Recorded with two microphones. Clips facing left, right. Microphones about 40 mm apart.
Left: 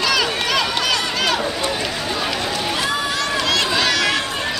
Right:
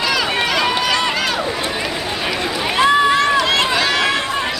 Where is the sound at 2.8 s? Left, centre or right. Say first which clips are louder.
Right 13 dB; right.